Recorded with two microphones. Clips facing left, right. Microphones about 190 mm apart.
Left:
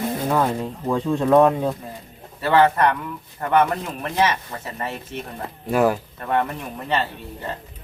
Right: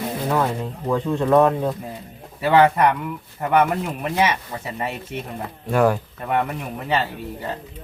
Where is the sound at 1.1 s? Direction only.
15° left (ahead or behind).